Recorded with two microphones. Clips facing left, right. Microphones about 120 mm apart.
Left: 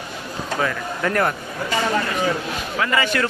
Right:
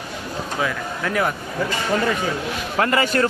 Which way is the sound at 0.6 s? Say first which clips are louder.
Left 2 dB; centre (ahead or behind).